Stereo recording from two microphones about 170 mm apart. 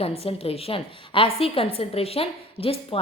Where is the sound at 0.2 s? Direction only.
35° left (ahead or behind).